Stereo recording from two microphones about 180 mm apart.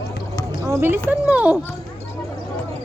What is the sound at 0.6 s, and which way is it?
Speech, 15° right (ahead or behind).